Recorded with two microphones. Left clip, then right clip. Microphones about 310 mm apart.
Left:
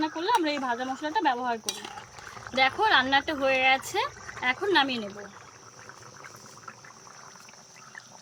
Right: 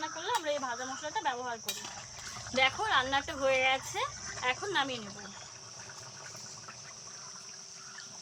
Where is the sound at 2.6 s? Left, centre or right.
Left.